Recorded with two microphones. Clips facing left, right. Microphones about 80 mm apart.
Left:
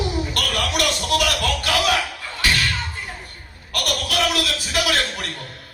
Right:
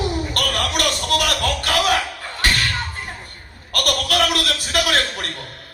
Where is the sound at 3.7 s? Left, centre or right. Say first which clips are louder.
Right 3 dB; right.